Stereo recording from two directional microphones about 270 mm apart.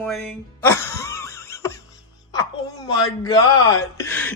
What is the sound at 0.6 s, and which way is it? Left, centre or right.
Cough, centre.